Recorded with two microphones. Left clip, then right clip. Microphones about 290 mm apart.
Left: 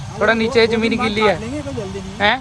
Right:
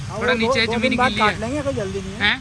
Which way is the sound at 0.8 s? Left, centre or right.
Centre.